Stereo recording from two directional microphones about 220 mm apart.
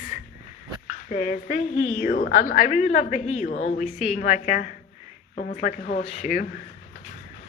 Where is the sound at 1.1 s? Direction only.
35° left (ahead or behind).